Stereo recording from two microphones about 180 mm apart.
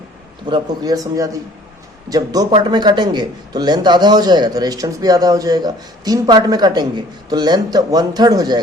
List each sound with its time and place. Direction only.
0.4 s a man's voice: 25° right (ahead or behind)